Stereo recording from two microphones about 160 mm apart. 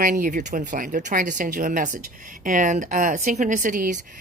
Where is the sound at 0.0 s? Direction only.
55° right (ahead or behind).